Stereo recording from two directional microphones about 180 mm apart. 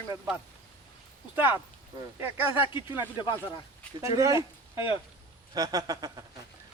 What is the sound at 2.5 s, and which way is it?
Speech, 30° left (ahead or behind).